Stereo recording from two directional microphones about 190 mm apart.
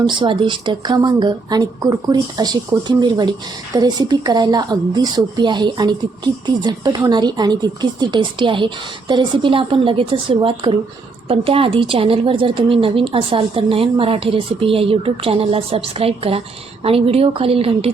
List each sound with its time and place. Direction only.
0.0 s a woman's voice: 25° right (ahead or behind)